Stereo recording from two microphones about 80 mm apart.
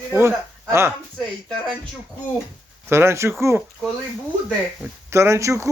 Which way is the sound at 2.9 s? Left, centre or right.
Right.